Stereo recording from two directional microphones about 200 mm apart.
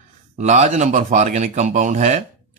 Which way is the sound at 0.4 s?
35° right (ahead or behind).